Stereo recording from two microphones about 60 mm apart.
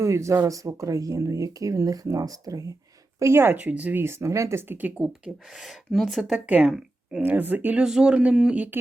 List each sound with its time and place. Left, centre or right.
0.0 s speech: right
3.2 s a woman's voice: right
3.4 s speech: right
4.0 s speech: right
4.8 s speech: right
5.0 s speech: centre
5.9 s speech: centre
6.4 s speech: right
6.7 s a sound: centre
7.2 s speech: right
7.8 s speech: centre